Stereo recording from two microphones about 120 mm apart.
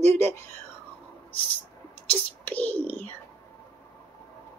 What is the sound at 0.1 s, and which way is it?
Speech, 20° left (ahead or behind).